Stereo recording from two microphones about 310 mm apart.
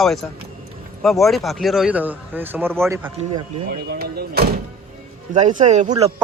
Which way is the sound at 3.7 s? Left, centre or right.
Right.